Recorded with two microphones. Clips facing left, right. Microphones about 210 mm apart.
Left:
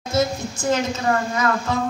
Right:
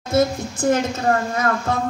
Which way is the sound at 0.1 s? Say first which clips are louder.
Right 3 dB; 55° right (ahead or behind).